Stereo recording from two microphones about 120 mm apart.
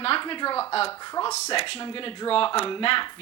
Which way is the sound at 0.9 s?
35° left (ahead or behind).